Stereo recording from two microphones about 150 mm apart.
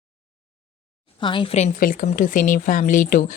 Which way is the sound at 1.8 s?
65° left (ahead or behind).